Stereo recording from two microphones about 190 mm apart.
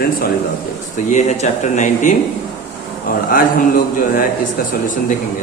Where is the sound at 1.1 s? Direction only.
40° left (ahead or behind).